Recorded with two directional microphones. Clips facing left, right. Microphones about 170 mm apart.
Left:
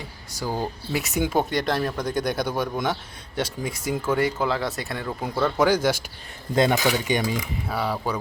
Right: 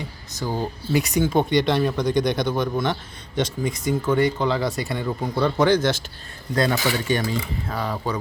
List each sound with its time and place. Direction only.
0.0 s speech: 10° left (ahead or behind)
6.5 s speech: 20° left (ahead or behind)